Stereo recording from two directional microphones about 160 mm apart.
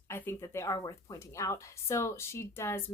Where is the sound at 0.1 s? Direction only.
15° left (ahead or behind).